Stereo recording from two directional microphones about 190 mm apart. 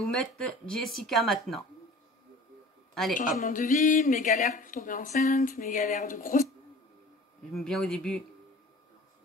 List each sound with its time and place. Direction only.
0.0 s speech: 5° left (ahead or behind)
2.9 s a sound: centre (ahead or behind)
3.2 s speech: 45° left (ahead or behind)
7.5 s speech: centre (ahead or behind)